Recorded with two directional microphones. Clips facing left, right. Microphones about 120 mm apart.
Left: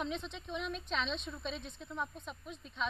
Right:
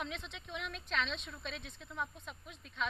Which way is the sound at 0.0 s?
30° left (ahead or behind).